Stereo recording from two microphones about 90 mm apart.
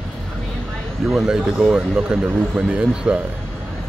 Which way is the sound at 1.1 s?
5° right (ahead or behind).